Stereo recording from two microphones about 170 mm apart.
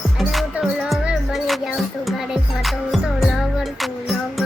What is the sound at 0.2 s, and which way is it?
Music, centre (ahead or behind).